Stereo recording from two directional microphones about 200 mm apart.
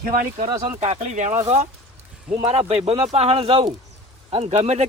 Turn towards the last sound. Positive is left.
turn(degrees=-35)  # may be behind; listen again after turning